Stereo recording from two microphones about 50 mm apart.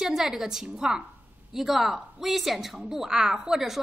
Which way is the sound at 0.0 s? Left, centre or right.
Centre.